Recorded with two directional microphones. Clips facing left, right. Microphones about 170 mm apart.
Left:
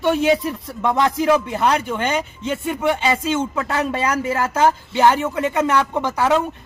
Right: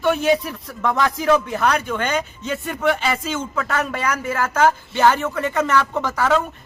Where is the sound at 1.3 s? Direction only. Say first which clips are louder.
Even; 10° left (ahead or behind).